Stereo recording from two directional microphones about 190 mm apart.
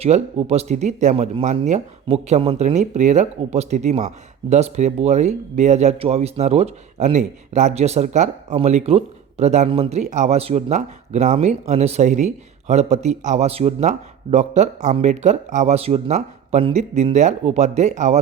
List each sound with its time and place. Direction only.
0.0 s speech: 35° right (ahead or behind)